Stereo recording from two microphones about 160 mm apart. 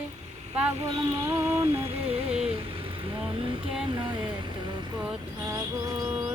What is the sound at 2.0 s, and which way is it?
Music, 40° right (ahead or behind).